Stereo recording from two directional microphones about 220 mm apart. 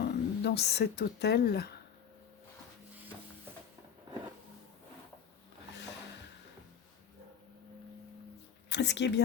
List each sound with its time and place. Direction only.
0.0 s speech: 50° left (ahead or behind)
8.7 s speech: 50° left (ahead or behind)